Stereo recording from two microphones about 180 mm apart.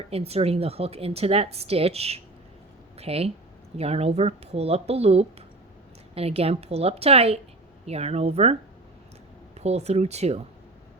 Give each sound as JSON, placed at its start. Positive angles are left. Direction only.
{"t": 0.1, "sound": "a woman's voice", "side_deg": -35}
{"t": 9.6, "sound": "a woman's voice", "side_deg": -35}